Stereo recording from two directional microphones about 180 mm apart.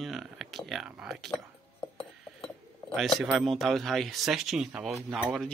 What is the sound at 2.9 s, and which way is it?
Speech, centre (ahead or behind).